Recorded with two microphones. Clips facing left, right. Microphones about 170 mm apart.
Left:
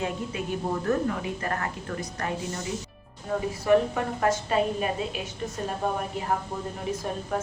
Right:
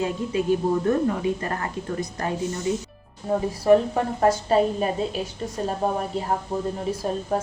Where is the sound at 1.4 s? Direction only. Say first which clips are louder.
Right 1 dB; 30° right (ahead or behind).